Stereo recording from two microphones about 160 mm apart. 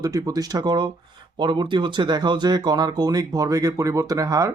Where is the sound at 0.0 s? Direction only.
20° right (ahead or behind).